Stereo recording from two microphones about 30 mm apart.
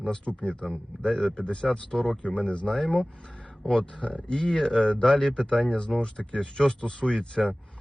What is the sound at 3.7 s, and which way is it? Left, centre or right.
Speech, left.